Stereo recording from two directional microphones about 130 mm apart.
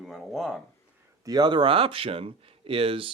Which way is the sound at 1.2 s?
30° right (ahead or behind).